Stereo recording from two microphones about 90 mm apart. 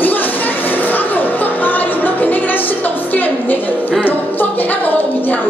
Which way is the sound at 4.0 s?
20° left (ahead or behind).